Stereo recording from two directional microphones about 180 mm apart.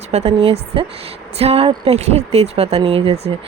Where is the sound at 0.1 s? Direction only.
35° right (ahead or behind).